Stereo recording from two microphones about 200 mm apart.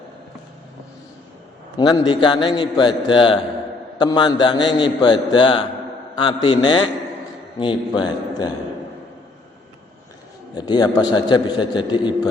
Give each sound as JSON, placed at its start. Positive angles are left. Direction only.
{"t": 1.8, "sound": "a man's voice", "side_deg": 20}
{"t": 10.5, "sound": "a man's voice", "side_deg": 20}